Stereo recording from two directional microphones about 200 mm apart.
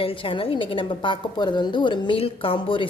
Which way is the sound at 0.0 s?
25° left (ahead or behind).